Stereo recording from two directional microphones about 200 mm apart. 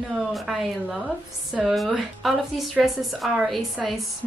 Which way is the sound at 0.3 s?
Centre (ahead or behind).